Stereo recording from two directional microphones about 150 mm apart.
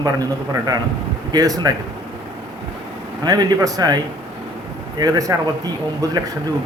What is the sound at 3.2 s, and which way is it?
A man's voice, 25° right (ahead or behind).